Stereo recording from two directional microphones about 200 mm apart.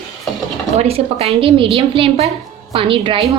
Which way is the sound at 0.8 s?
30° right (ahead or behind).